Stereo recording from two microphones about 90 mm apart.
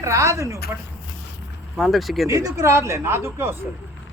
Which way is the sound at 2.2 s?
40° right (ahead or behind).